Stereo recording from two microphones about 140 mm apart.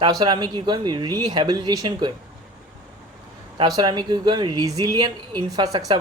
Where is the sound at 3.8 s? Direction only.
30° right (ahead or behind).